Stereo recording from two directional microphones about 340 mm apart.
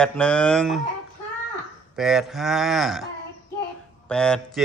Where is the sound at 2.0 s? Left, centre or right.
Centre.